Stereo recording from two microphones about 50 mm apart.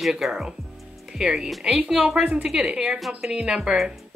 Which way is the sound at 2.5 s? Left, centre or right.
Centre.